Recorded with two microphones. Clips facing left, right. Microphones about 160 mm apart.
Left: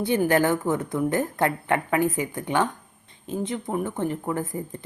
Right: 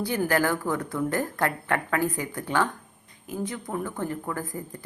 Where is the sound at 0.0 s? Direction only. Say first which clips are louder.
Left 4 dB; 20° left (ahead or behind).